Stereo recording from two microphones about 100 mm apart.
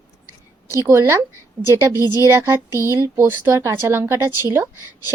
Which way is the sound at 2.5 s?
25° right (ahead or behind).